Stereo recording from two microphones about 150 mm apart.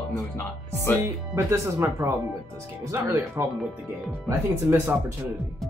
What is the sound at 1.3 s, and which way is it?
Speech, 20° right (ahead or behind).